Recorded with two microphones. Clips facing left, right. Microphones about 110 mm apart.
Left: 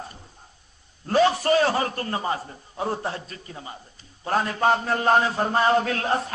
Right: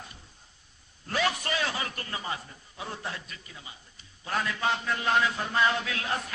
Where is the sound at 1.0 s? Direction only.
35° left (ahead or behind).